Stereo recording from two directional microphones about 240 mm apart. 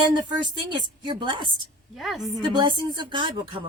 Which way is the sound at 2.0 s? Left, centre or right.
Centre.